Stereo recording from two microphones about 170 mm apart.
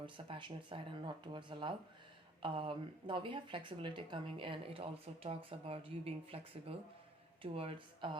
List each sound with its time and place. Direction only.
0.0 s speech: 30° right (ahead or behind)